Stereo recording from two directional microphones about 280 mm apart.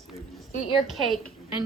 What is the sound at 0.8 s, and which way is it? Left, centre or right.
Speech, centre.